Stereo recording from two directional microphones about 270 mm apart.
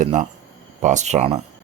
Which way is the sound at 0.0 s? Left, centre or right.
Right.